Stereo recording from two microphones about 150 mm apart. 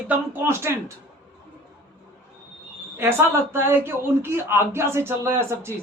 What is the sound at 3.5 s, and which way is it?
Speech, 15° right (ahead or behind).